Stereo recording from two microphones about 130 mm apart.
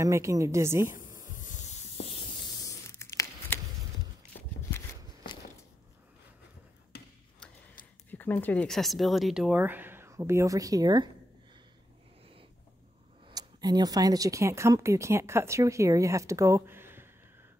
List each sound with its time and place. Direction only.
0.0 s speech: 25° right (ahead or behind)
1.3 s spray: 80° left
2.6 s a sound: 20° left (ahead or behind)
8.1 s speech: 15° left (ahead or behind); by 11.1 s 30° right (ahead or behind)
13.3 s speech: 30° right (ahead or behind)